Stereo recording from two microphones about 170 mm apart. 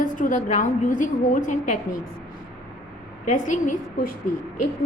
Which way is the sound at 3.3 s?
50° left (ahead or behind).